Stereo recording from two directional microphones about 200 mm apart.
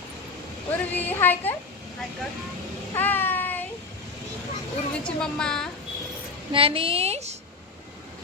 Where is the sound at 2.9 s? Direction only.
10° left (ahead or behind).